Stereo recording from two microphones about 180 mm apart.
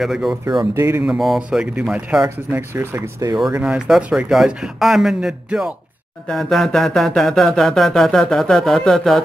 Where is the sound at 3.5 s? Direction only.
5° right (ahead or behind).